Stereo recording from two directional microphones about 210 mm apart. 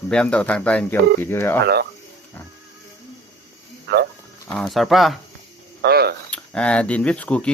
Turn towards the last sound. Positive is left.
turn(degrees=5)  # may be behind; listen again after turning